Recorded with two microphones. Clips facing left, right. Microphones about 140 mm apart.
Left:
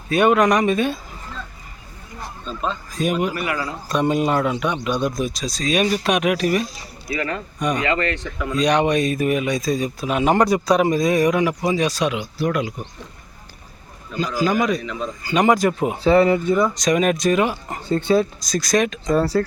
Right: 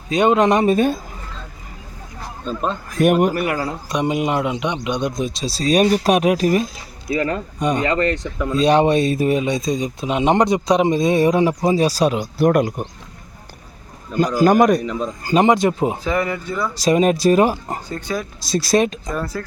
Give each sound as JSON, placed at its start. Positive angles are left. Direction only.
{"t": 0.1, "sound": "speech", "side_deg": -20}
{"t": 2.4, "sound": "a man's voice", "side_deg": -50}
{"t": 3.8, "sound": "speech", "side_deg": -15}
{"t": 14.2, "sound": "a man's voice", "side_deg": -50}
{"t": 15.4, "sound": "speech", "side_deg": -25}
{"t": 16.0, "sound": "speech", "side_deg": 30}
{"t": 16.7, "sound": "speech", "side_deg": -30}
{"t": 17.8, "sound": "speech", "side_deg": 25}
{"t": 18.4, "sound": "speech", "side_deg": -30}
{"t": 19.1, "sound": "speech", "side_deg": 30}